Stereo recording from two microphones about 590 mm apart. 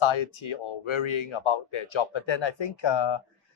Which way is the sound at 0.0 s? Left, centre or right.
Left.